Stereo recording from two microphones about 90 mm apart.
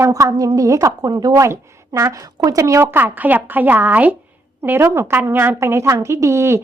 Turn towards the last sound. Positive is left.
turn(degrees=-30)  # may be behind; listen again after turning